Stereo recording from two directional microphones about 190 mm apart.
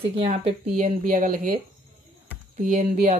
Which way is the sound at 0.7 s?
45° right (ahead or behind).